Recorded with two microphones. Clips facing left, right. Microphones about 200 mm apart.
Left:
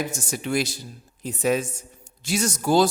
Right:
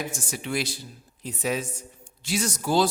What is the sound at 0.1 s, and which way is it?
A man's voice, 45° left (ahead or behind).